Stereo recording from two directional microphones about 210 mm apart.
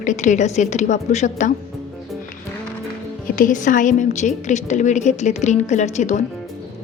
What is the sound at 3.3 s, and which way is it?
A woman's voice, 40° left (ahead or behind).